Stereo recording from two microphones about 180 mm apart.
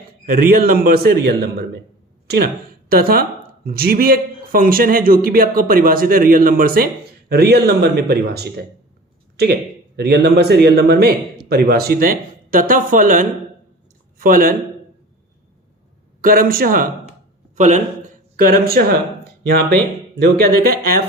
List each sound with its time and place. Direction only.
0.3 s a man's voice: 55° right (ahead or behind)
2.9 s a man's voice: 55° right (ahead or behind)
16.2 s speech: 55° right (ahead or behind)
17.5 s a sound: 40° right (ahead or behind)
18.3 s speech: 50° right (ahead or behind)